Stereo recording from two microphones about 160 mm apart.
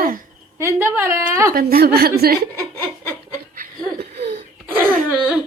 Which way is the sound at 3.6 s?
80° right.